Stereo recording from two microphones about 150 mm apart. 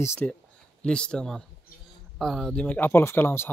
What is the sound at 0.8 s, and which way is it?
Speech, 5° left (ahead or behind).